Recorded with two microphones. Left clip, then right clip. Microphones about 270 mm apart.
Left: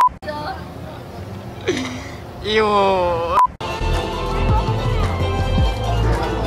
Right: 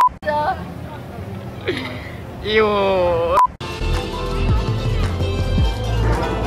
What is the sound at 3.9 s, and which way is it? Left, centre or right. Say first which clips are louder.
Music: even; centre.